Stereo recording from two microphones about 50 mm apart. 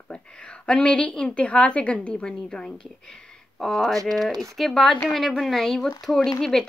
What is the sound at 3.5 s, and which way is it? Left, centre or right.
Speech, centre.